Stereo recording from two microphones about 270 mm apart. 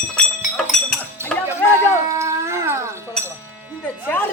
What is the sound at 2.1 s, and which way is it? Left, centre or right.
Howl, centre.